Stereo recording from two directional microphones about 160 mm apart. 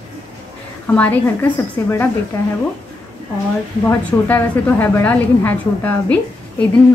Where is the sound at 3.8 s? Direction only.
15° left (ahead or behind).